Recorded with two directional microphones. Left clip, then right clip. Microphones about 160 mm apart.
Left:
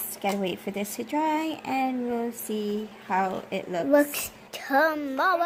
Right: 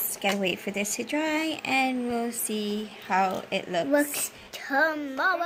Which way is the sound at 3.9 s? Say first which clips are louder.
Left 6 dB; 50° left (ahead or behind).